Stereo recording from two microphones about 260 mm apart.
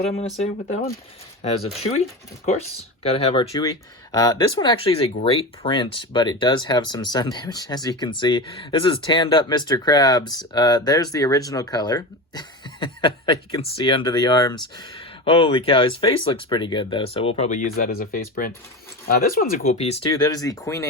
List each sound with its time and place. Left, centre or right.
0.1 s speech: left
2.5 s speech: left